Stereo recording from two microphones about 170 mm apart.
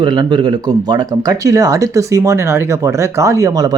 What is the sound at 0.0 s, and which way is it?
Speech, 25° right (ahead or behind).